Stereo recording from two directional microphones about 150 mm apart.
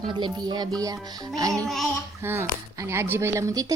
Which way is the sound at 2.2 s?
15° right (ahead or behind).